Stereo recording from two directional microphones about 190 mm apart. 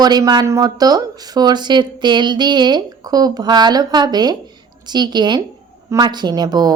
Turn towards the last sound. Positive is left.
turn(degrees=-20)  # may be behind; listen again after turning